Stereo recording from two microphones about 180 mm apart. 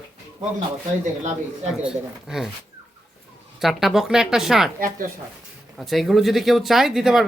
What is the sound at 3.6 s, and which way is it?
Speech, centre (ahead or behind).